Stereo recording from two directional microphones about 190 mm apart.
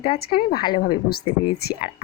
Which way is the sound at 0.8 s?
50° left (ahead or behind).